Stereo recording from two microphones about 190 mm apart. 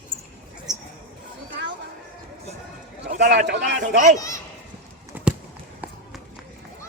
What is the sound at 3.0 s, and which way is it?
Speech, 60° right (ahead or behind).